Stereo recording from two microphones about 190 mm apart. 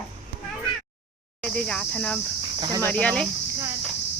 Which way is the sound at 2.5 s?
25° right (ahead or behind).